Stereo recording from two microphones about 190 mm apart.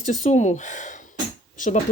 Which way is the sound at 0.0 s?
40° left (ahead or behind).